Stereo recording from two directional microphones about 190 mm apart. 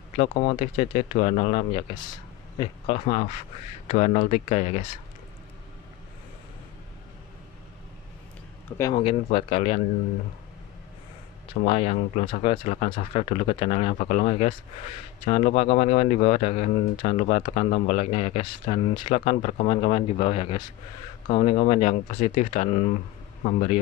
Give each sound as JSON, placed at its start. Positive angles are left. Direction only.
{"t": 0.3, "sound": "speech", "side_deg": 40}
{"t": 8.7, "sound": "speech", "side_deg": 10}
{"t": 9.0, "sound": "speech", "side_deg": 30}
{"t": 11.6, "sound": "speech", "side_deg": 30}